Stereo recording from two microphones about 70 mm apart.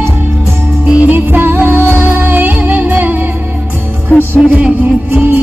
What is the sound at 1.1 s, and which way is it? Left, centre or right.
Music, right.